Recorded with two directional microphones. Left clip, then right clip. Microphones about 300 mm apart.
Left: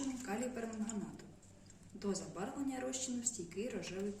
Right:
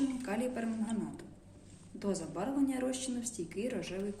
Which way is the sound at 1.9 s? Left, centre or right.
Centre.